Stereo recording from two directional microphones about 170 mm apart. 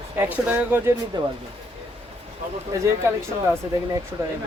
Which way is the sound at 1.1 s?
30° right (ahead or behind).